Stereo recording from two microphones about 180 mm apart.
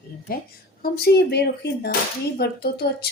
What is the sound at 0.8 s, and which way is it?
A woman's voice, 60° left (ahead or behind).